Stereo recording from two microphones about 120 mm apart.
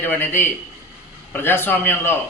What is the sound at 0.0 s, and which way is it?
A man's voice, 20° left (ahead or behind).